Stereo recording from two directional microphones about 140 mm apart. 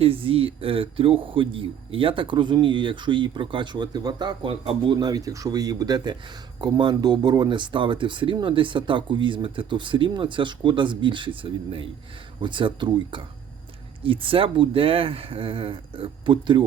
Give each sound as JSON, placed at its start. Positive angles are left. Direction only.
{"t": 0.0, "sound": "speech", "side_deg": -40}